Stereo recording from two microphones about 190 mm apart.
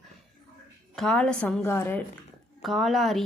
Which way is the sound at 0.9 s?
5° left (ahead or behind).